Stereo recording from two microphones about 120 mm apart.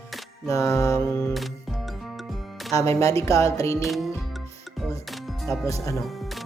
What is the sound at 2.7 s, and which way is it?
Speech, 25° left (ahead or behind).